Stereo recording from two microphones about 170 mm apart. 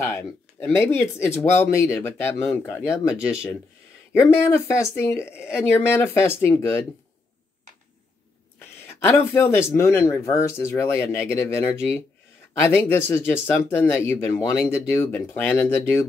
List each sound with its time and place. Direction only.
0.0 s speech: 15° left (ahead or behind)
8.5 s speech: 15° left (ahead or behind)